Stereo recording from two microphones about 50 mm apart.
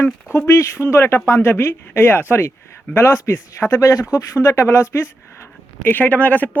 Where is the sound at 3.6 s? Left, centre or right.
Left.